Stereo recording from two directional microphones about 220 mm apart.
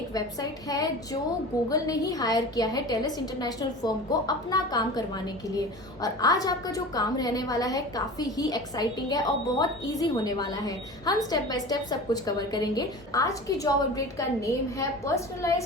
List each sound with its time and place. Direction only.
0.1 s a woman's voice: 15° left (ahead or behind)